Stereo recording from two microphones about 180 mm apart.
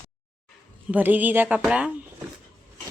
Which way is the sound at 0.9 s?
10° right (ahead or behind).